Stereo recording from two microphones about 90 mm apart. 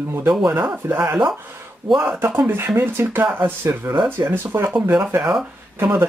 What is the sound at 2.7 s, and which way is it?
Speech, 25° right (ahead or behind).